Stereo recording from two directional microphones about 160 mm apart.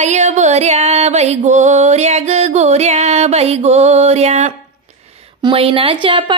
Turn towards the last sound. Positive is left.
turn(degrees=-30)  # may be behind; listen again after turning